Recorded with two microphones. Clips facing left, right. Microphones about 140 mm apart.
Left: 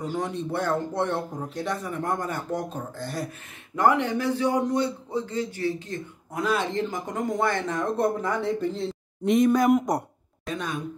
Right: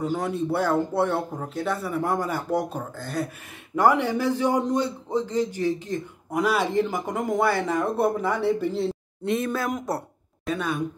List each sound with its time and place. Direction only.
0.2 s speech: 5° right (ahead or behind)
9.2 s speech: 15° left (ahead or behind)
10.4 s speech: 5° right (ahead or behind)